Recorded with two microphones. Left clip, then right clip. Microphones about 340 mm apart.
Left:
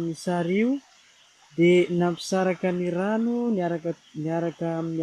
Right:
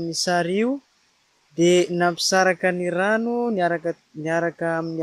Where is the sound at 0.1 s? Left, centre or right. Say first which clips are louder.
Right 8 dB; right.